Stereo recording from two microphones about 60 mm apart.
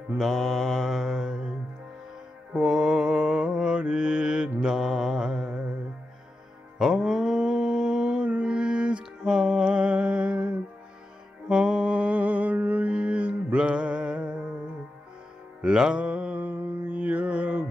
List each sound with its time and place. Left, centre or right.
0.2 s mantra: centre
2.5 s mantra: centre
6.8 s mantra: centre
9.2 s music: centre
11.4 s mantra: centre
15.6 s mantra: centre